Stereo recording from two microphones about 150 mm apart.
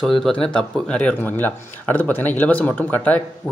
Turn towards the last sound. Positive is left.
turn(degrees=10)  # may be behind; listen again after turning